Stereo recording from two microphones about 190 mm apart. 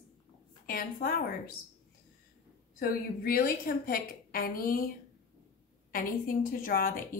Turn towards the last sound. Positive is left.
turn(degrees=50)  # may be behind; listen again after turning